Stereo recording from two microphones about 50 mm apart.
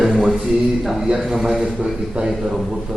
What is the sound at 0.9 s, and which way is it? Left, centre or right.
A man's voice, centre.